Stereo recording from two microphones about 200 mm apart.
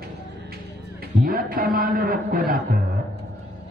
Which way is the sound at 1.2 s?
45° right (ahead or behind).